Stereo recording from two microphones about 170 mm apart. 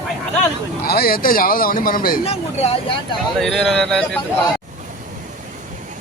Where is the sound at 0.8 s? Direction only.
65° left (ahead or behind).